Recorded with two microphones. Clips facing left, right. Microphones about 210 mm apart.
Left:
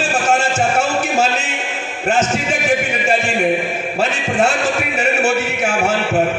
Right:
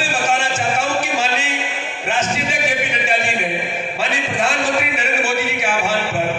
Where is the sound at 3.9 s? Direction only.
45° left (ahead or behind).